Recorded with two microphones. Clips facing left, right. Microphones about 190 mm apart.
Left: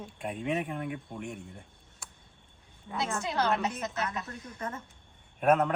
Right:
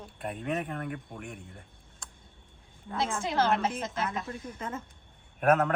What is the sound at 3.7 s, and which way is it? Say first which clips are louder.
A woman's voice: right 1 dB; 25° right (ahead or behind).